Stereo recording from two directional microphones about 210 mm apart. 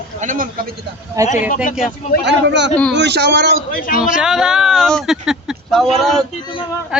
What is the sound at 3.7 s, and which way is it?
Speech, 40° left (ahead or behind).